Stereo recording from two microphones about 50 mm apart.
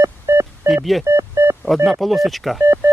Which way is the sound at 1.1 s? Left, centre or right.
Right.